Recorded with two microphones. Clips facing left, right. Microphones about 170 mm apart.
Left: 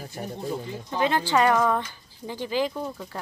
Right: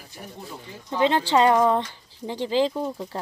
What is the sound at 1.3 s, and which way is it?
Speech, 25° right (ahead or behind).